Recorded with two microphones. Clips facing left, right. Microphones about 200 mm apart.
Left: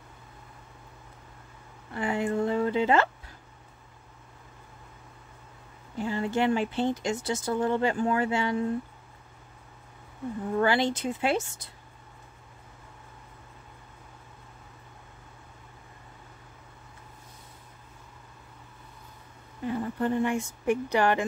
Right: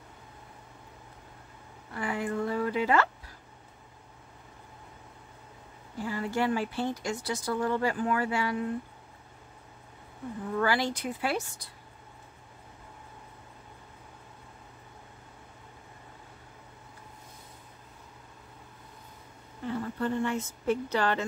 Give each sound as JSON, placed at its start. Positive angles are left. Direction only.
{"t": 2.0, "sound": "speech", "side_deg": 25}
{"t": 5.9, "sound": "speech", "side_deg": 25}
{"t": 10.6, "sound": "speech", "side_deg": 25}
{"t": 19.6, "sound": "speech", "side_deg": 15}